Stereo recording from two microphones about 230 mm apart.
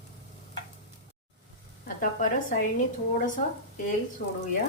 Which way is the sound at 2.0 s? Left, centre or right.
Left.